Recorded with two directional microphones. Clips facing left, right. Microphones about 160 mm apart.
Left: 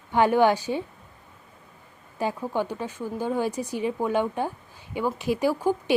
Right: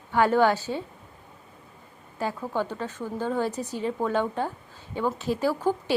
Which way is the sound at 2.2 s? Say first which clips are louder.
Left 2 dB; 15° left (ahead or behind).